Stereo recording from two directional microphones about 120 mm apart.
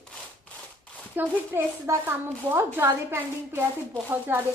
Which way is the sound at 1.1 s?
15° right (ahead or behind).